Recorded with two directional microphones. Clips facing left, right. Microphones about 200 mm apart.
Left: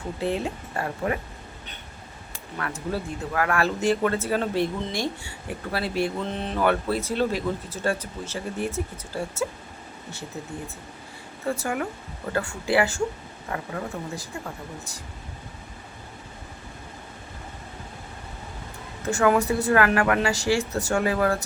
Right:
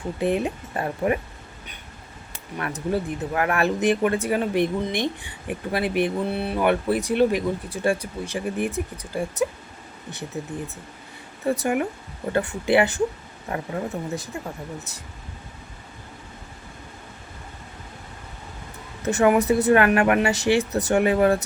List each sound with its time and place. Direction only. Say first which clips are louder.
0.2 s speech: right 4 dB; 15° right (ahead or behind)
2.6 s speech: right 4 dB; 20° right (ahead or behind)
11.4 s speech: right 5 dB; 20° right (ahead or behind)
19.0 s speech: right 3 dB; 20° right (ahead or behind)